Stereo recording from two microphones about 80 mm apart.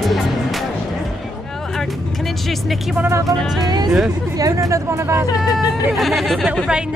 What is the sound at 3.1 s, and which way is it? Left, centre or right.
Speech, right.